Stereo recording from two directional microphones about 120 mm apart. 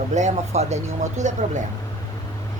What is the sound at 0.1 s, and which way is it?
Speech, 80° right.